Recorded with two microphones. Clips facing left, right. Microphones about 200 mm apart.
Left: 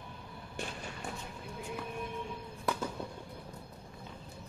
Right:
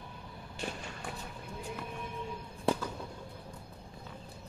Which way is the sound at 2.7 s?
25° right (ahead or behind).